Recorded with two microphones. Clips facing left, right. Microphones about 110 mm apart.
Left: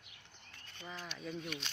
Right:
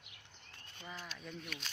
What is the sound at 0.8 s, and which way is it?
Speech, centre (ahead or behind).